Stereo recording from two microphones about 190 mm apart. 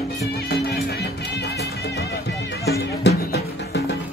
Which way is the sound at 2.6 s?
55° left (ahead or behind).